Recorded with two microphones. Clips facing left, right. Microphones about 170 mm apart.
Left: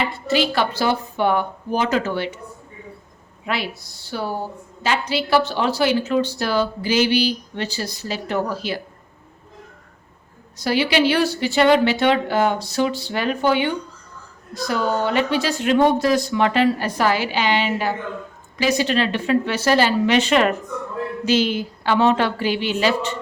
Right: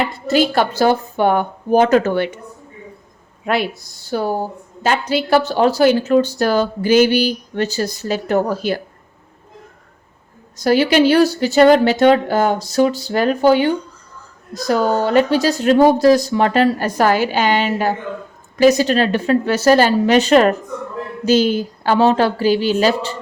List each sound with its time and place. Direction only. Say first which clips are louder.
0.3 s a woman's voice: right 5 dB; 45° right (ahead or behind)
3.4 s a woman's voice: right 7 dB; 50° right (ahead or behind)
10.6 s a woman's voice: right 6 dB; 45° right (ahead or behind)